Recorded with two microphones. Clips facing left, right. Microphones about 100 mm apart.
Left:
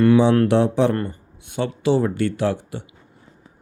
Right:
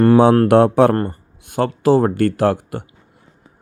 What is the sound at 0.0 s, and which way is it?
A man's voice, 45° right (ahead or behind).